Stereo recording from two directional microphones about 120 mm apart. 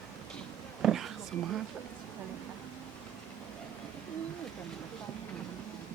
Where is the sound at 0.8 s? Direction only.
Centre (ahead or behind).